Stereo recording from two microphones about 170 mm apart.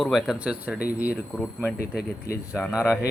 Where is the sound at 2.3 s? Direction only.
65° left (ahead or behind).